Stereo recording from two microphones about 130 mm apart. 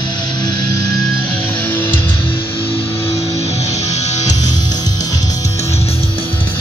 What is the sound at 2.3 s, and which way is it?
Music, 45° left (ahead or behind).